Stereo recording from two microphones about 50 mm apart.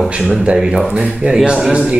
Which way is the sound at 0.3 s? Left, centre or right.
Right.